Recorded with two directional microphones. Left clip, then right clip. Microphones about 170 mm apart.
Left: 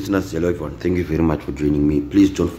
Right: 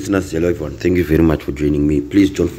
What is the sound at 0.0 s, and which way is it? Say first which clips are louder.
Speech: right 3 dB; 20° right (ahead or behind).